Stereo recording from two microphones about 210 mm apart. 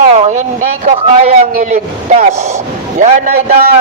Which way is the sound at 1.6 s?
35° right (ahead or behind).